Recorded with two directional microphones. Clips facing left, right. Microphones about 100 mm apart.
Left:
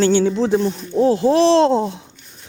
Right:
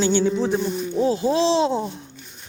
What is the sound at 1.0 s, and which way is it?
Speech, 60° left (ahead or behind).